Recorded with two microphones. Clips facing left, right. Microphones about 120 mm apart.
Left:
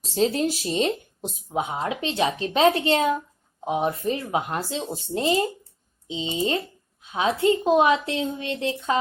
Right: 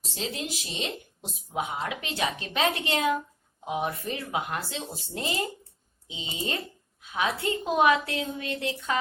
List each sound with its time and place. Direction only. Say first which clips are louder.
0.0 s speech: left 12 dB; 35° left (ahead or behind)
1.5 s a woman's voice: left 4 dB; 30° left (ahead or behind)